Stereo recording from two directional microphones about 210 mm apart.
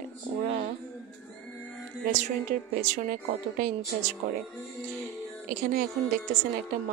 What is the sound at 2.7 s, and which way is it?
A woman's voice, 35° right (ahead or behind).